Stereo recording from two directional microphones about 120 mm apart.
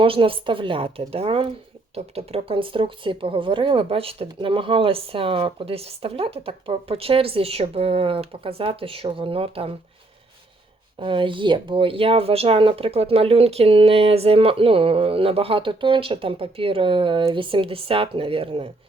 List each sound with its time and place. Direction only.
0.0 s speech: 50° right (ahead or behind)
11.0 s speech: 45° right (ahead or behind)